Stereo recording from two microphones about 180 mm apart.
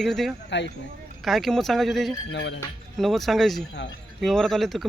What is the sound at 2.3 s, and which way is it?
Speech, 75° left (ahead or behind).